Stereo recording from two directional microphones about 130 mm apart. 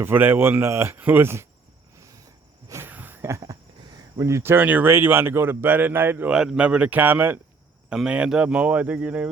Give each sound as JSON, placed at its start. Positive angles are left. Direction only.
{"t": 0.0, "sound": "speech", "side_deg": -15}
{"t": 2.0, "sound": "a sound", "side_deg": -25}
{"t": 4.2, "sound": "speech", "side_deg": -20}